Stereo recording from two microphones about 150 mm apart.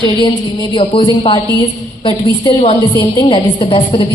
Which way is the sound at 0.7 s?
35° left (ahead or behind).